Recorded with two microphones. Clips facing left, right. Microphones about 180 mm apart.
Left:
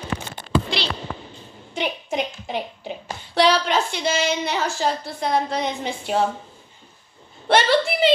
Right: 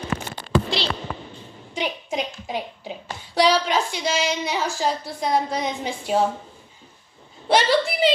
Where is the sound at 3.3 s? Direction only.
60° left (ahead or behind).